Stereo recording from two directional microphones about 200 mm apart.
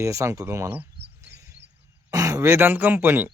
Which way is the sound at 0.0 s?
15° right (ahead or behind).